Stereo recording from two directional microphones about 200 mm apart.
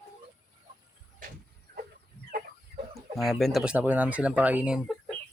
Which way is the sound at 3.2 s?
Centre (ahead or behind).